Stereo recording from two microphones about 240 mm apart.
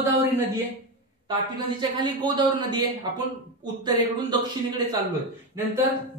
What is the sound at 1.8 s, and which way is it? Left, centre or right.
A man's voice, centre.